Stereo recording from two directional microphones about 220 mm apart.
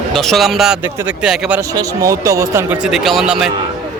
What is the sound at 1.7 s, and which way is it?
A man's voice, 15° right (ahead or behind).